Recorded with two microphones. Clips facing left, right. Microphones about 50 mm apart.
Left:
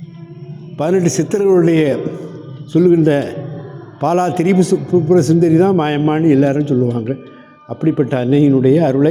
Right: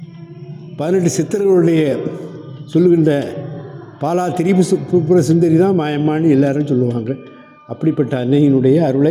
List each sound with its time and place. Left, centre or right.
0.8 s a man's voice: left